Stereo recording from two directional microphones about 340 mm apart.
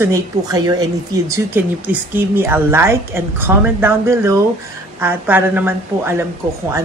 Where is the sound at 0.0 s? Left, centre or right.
Centre.